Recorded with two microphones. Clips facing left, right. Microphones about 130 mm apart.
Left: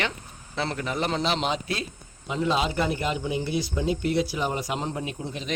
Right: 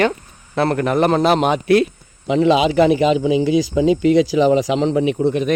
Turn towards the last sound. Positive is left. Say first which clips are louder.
# right 16 dB
turn(degrees=-65)  # may be behind; listen again after turning